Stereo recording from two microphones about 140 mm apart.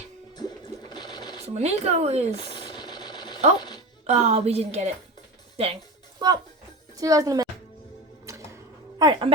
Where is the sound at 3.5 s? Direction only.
30° left (ahead or behind).